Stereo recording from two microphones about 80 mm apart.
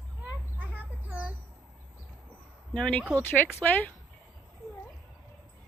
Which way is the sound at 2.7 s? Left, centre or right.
Centre.